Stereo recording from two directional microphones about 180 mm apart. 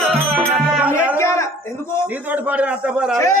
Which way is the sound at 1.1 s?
15° left (ahead or behind).